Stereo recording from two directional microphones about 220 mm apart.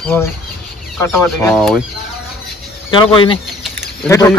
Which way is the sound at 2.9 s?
25° left (ahead or behind).